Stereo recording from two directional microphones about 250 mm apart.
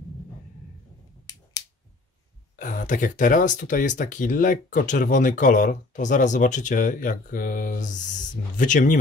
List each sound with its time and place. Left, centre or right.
2.5 s speech: left